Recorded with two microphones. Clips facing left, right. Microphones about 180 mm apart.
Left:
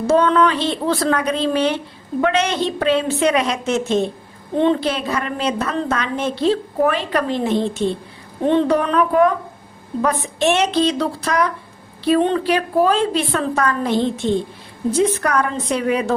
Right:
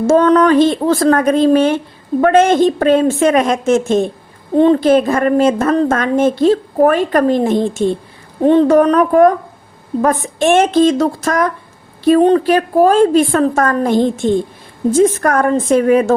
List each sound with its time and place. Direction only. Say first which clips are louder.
0.1 s a woman's voice: right 5 dB; 45° right (ahead or behind)